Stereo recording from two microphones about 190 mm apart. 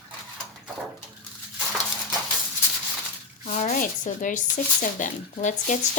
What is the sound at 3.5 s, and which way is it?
Speech, 40° left (ahead or behind).